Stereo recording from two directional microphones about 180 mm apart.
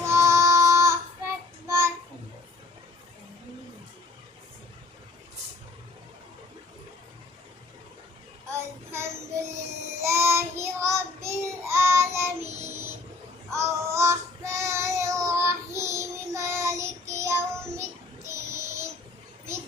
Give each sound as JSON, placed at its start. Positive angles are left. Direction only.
{"t": 0.0, "sound": "child singing", "side_deg": -15}
{"t": 8.9, "sound": "child singing", "side_deg": -15}